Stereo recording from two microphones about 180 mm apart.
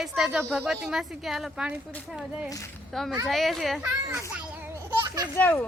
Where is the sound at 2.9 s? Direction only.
Centre (ahead or behind).